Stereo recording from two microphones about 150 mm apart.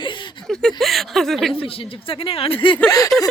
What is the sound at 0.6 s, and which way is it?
Speech, centre (ahead or behind).